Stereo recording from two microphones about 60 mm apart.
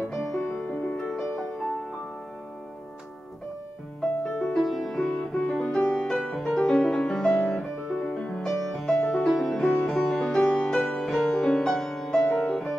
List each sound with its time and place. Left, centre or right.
0.1 s music: centre
0.4 s music: left
0.9 s music: centre
4.2 s music: centre
4.6 s music: centre